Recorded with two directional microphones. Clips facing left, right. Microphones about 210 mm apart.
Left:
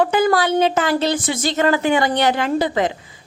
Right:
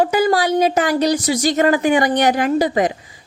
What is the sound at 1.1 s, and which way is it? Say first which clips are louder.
Speech: right 3 dB; 40° right (ahead or behind).